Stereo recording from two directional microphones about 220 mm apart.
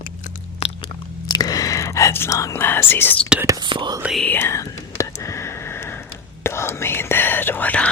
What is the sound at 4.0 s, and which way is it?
Whispering, centre (ahead or behind).